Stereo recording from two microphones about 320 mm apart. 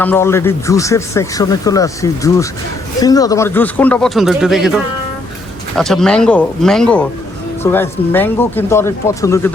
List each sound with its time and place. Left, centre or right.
0.0 s a man's voice: centre